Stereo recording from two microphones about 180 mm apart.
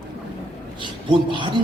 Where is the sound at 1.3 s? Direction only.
25° right (ahead or behind).